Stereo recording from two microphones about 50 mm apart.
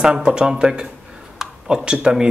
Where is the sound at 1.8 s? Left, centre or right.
Centre.